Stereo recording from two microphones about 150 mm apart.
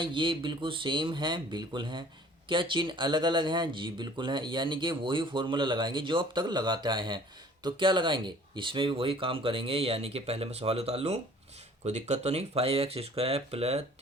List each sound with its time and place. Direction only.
0.0 s speech: 35° right (ahead or behind)